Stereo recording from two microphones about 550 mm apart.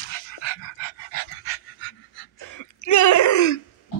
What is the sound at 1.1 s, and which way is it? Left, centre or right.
Pant, left.